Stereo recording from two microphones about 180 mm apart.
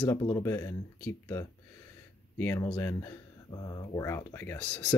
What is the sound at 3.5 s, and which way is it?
Speech, 25° left (ahead or behind).